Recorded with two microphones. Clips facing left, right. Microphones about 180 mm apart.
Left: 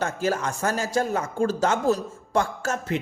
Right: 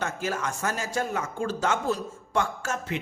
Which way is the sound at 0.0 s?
35° left (ahead or behind).